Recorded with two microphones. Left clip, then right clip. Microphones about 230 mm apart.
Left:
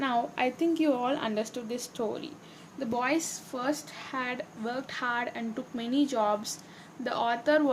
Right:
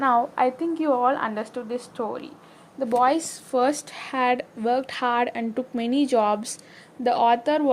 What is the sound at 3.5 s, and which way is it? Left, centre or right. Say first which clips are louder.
A woman's voice: right 11 dB; right.